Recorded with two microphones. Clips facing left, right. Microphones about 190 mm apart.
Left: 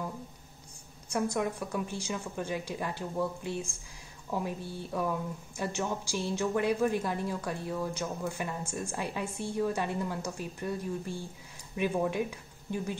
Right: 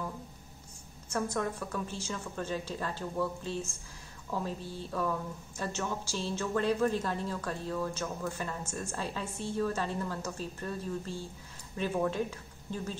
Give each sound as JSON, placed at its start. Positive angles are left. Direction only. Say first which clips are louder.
{"t": 1.1, "sound": "speech", "louder": "left 2 dB", "side_deg": 15}